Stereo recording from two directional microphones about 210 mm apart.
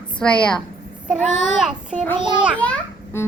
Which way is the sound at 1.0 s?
Centre (ahead or behind).